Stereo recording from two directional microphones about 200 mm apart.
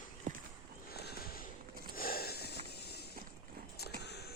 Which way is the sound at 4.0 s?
55° left (ahead or behind).